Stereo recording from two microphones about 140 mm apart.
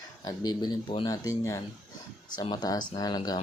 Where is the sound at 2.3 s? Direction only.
30° left (ahead or behind).